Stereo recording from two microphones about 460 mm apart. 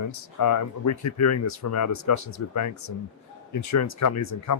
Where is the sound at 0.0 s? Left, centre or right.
Left.